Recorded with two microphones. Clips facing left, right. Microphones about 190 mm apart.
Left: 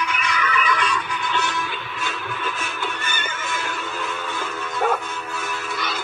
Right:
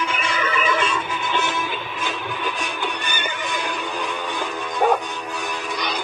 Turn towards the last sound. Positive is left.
turn(degrees=-15)  # may be behind; listen again after turning